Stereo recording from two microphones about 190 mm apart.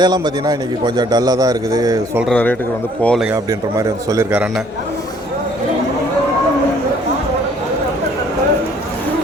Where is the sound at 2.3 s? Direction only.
10° left (ahead or behind).